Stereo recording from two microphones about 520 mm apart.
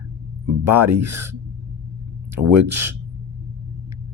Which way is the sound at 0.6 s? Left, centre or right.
Right.